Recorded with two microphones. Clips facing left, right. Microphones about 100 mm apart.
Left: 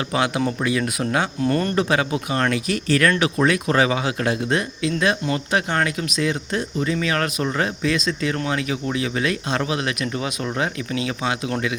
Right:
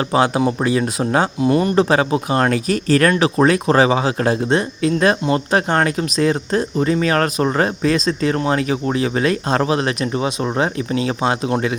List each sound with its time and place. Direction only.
0.1 s speech: 30° right (ahead or behind)
1.4 s speech: 15° right (ahead or behind)
1.7 s speech: 35° right (ahead or behind)
4.8 s speech: 45° right (ahead or behind)